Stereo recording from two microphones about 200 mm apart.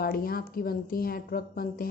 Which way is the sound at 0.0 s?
45° left (ahead or behind).